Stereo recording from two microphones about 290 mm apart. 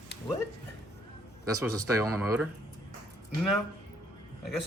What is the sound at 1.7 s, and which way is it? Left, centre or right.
Speech, centre.